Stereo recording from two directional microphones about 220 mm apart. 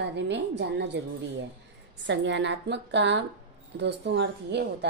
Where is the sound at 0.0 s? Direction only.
50° right (ahead or behind).